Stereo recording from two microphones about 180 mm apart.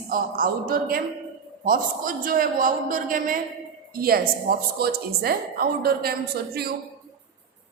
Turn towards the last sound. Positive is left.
turn(degrees=-60)  # may be behind; listen again after turning